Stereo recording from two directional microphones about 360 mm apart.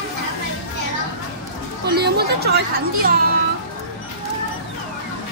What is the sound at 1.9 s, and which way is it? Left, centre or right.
Speech, right.